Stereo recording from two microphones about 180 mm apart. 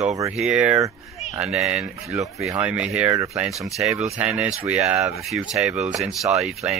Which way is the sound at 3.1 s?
15° right (ahead or behind).